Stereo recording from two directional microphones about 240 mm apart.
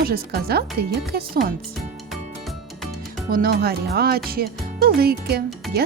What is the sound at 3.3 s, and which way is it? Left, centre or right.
Speech, right.